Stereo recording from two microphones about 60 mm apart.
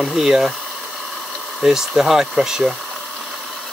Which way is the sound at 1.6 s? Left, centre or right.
Centre.